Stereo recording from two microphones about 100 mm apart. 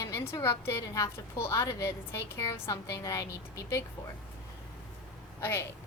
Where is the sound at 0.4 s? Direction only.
25° left (ahead or behind).